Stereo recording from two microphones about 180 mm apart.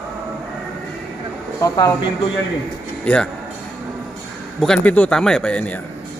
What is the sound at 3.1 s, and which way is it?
Speech, 5° left (ahead or behind).